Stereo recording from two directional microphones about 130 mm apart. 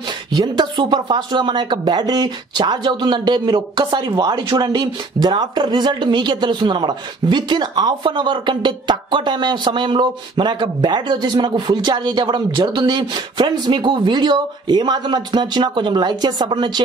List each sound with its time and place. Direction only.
0.3 s speech: 35° right (ahead or behind)